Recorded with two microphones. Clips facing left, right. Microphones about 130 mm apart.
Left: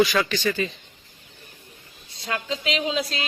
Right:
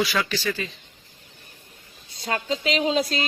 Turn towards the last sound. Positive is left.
turn(degrees=-40)  # may be behind; listen again after turning